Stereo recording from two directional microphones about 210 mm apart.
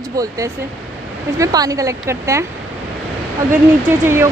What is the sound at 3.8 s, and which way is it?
Speech, 10° right (ahead or behind).